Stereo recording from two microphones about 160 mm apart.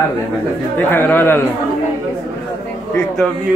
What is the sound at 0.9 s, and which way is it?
Speech, 15° left (ahead or behind).